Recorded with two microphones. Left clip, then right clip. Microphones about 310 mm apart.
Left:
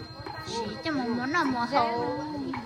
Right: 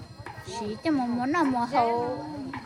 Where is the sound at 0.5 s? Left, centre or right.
Right.